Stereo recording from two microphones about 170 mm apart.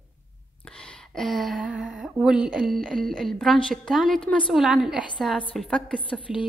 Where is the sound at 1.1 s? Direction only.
Centre (ahead or behind).